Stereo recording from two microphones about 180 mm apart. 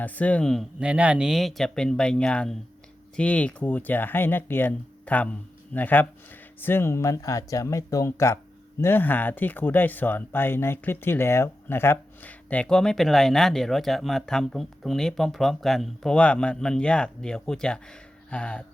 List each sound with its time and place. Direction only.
0.0 s speech: 10° left (ahead or behind)